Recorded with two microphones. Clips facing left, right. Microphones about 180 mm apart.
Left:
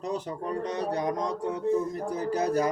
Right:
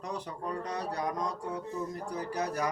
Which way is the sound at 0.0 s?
25° left (ahead or behind).